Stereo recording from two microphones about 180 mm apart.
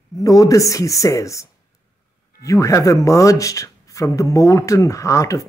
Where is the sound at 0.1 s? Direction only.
20° left (ahead or behind).